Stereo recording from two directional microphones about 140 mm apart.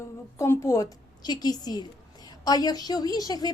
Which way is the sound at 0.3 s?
20° left (ahead or behind).